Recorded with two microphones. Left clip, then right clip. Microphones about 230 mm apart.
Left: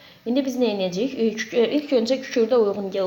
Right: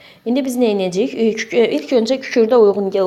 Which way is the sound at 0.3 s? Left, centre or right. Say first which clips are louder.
Right 6 dB; right.